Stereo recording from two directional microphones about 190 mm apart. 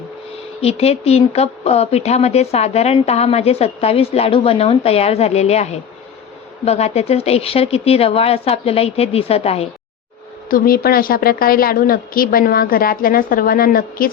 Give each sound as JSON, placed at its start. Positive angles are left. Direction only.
{"t": 0.6, "sound": "speech", "side_deg": 30}
{"t": 10.5, "sound": "a woman's voice", "side_deg": 50}